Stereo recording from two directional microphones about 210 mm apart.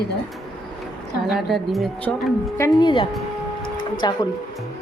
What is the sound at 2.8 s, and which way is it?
Speech, 25° left (ahead or behind).